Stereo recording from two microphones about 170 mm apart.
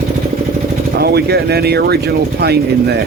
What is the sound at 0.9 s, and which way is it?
Speech, 70° right (ahead or behind).